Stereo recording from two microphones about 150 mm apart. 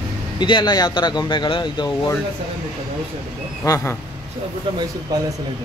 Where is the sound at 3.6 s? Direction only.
15° left (ahead or behind).